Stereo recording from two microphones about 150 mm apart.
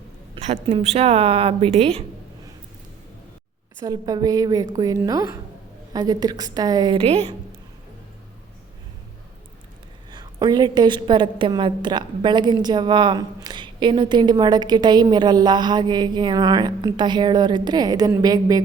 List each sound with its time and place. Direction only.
0.6 s a woman's voice: 45° right (ahead or behind)
3.8 s a woman's voice: 25° right (ahead or behind)
7.0 s a woman's voice: 45° right (ahead or behind)
10.1 s a woman's voice: 30° right (ahead or behind)